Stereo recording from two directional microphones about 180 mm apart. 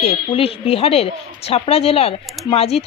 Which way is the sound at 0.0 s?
30° left (ahead or behind).